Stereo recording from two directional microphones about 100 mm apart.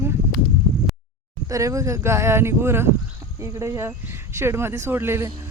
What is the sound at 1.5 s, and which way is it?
Speech, 35° right (ahead or behind).